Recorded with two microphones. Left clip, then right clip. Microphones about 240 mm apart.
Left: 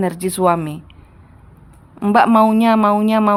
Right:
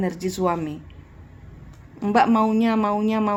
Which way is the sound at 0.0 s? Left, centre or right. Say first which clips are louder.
Left 7 dB; left.